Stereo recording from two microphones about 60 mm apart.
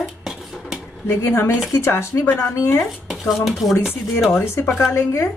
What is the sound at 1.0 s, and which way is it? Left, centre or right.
Speech, left.